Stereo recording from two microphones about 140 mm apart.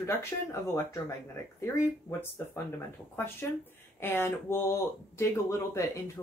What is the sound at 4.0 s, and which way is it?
Speech, 15° left (ahead or behind).